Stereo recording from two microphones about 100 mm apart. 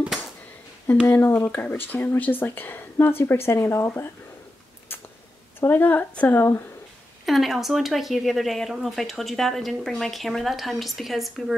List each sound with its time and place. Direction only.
1.1 s a woman's voice: 20° left (ahead or behind)
5.6 s a woman's voice: 20° left (ahead or behind)
7.2 s speech: centre (ahead or behind)